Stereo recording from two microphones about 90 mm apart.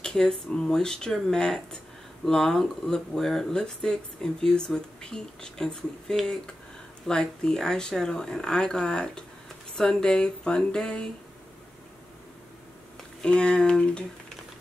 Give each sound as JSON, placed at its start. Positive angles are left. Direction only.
{"t": 0.0, "sound": "speech", "side_deg": 5}
{"t": 13.2, "sound": "speech", "side_deg": 10}